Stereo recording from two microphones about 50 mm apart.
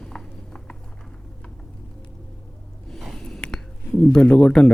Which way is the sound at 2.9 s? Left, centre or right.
Centre.